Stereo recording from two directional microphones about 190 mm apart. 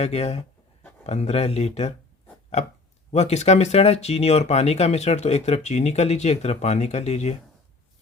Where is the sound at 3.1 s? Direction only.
35° left (ahead or behind).